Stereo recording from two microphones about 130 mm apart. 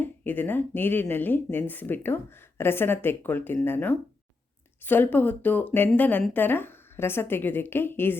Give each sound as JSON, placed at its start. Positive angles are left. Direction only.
{"t": 0.0, "sound": "speech", "side_deg": 15}